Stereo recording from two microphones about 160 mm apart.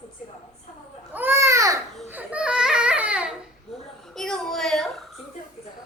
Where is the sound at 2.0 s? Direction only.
10° right (ahead or behind).